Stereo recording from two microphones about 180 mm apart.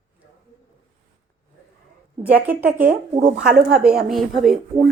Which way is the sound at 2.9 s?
40° right (ahead or behind).